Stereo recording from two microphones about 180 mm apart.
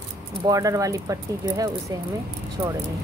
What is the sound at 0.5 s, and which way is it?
Speech, 20° right (ahead or behind).